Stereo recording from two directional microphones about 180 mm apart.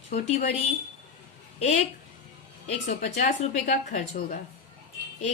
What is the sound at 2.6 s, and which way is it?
A woman's voice, 40° left (ahead or behind).